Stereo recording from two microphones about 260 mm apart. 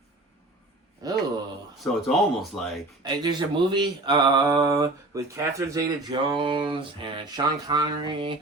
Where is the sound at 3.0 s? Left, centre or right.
Centre.